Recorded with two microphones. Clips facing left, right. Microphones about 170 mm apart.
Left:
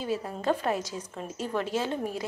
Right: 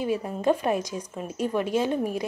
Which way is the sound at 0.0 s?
15° right (ahead or behind).